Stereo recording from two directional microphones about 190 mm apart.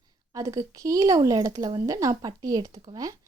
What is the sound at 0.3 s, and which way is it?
A woman's voice, 15° right (ahead or behind).